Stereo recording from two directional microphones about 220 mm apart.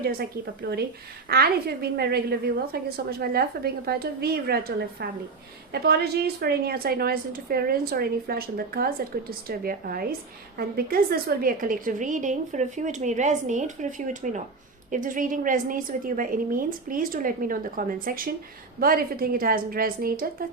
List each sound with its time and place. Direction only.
0.0 s a woman's voice: 45° right (ahead or behind)